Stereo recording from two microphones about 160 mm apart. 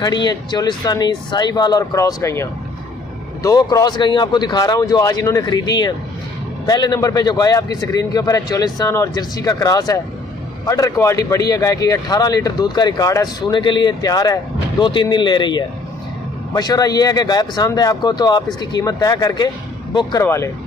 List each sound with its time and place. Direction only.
0.0 s speech: 25° left (ahead or behind)